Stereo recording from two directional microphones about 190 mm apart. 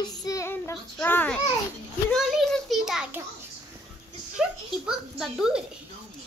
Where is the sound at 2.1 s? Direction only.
Centre (ahead or behind).